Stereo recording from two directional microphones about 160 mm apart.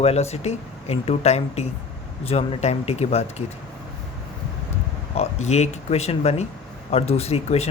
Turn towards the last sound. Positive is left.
turn(degrees=40)  # may be behind; listen again after turning